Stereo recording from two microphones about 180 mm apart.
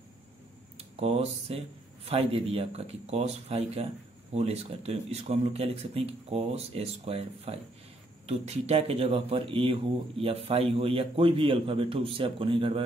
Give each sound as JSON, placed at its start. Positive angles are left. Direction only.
{"t": 0.7, "sound": "speech", "side_deg": -35}